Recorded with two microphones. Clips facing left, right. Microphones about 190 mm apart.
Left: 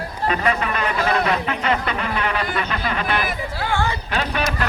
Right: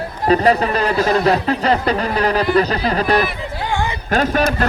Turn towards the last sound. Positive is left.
turn(degrees=-45)  # may be behind; listen again after turning